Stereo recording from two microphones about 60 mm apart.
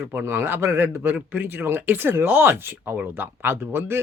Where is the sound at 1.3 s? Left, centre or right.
Right.